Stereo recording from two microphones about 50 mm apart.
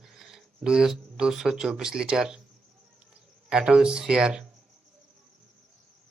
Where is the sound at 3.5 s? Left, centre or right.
Centre.